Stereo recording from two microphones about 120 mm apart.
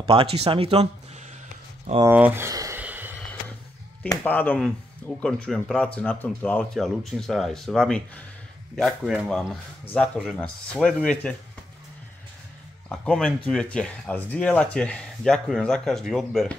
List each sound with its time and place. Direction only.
0.0 s speech: 50° right (ahead or behind)
2.0 s speech: 15° right (ahead or behind)
2.5 s a sound: 30° right (ahead or behind)
2.8 s a sound: 15° right (ahead or behind)
4.2 s speech: 15° left (ahead or behind)
12.9 s speech: 5° left (ahead or behind)